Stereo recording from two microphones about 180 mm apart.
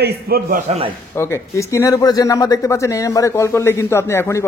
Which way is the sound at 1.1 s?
15° left (ahead or behind).